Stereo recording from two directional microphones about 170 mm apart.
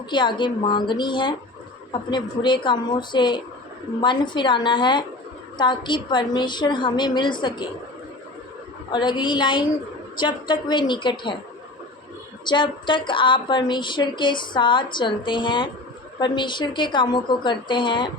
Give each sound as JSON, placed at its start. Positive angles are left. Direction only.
{"t": 0.1, "sound": "speech", "side_deg": 30}
{"t": 8.9, "sound": "speech", "side_deg": 25}
{"t": 12.5, "sound": "speech", "side_deg": 30}